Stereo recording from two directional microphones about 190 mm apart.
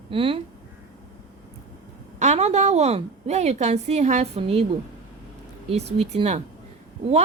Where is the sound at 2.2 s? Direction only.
35° right (ahead or behind).